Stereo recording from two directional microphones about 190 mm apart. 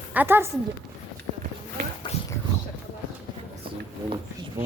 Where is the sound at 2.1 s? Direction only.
35° left (ahead or behind).